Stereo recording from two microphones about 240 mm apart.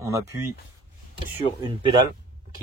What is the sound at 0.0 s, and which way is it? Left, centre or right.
Speech, centre.